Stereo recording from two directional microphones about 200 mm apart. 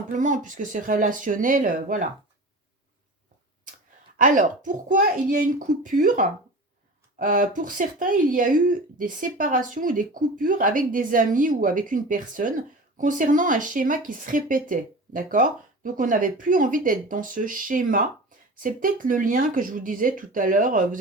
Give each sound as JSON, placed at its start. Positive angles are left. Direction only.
{"t": 0.1, "sound": "speech", "side_deg": -40}
{"t": 4.2, "sound": "speech", "side_deg": -40}